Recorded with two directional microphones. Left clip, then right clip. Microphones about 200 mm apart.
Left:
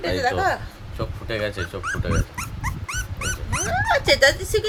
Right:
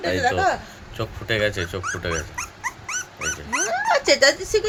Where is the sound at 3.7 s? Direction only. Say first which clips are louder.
Even; 30° right (ahead or behind).